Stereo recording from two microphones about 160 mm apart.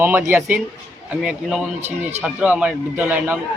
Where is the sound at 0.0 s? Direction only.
10° right (ahead or behind).